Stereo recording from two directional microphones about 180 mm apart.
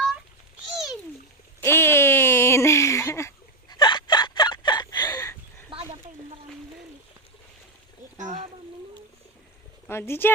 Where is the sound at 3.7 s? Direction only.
25° left (ahead or behind).